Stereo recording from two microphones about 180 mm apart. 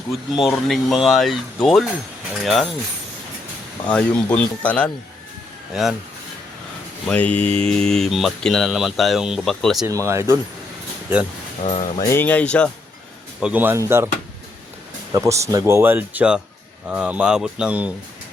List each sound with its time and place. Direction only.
0.1 s speech: centre (ahead or behind)
3.8 s speech: 5° left (ahead or behind)
7.1 s speech: 5° left (ahead or behind)
9.8 s speech: 15° right (ahead or behind)
11.6 s speech: 40° left (ahead or behind)
11.9 s speech: 15° left (ahead or behind)
13.4 s speech: 10° right (ahead or behind)
15.1 s speech: 15° right (ahead or behind)